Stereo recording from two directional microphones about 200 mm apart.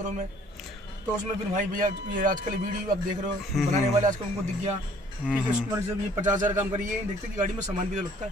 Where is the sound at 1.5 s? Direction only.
40° right (ahead or behind).